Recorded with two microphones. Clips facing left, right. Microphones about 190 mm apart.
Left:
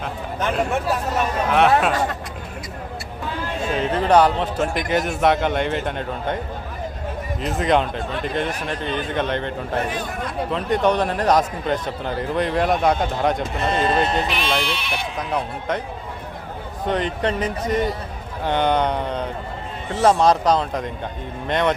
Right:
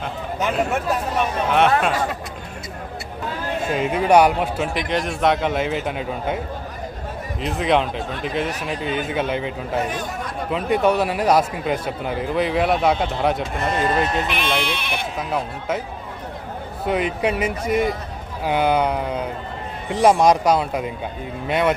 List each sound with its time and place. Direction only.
0.0 s a man's voice: 5° right (ahead or behind)
3.8 s speech: 10° right (ahead or behind)
4.9 s a man's voice: 5° left (ahead or behind)
7.4 s a man's voice: centre (ahead or behind)
14.3 s speech: 55° right (ahead or behind)
15.3 s a man's voice: 5° right (ahead or behind)
16.8 s speech: 10° right (ahead or behind)